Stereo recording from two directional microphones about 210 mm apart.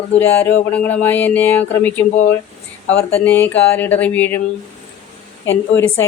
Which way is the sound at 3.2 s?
10° left (ahead or behind).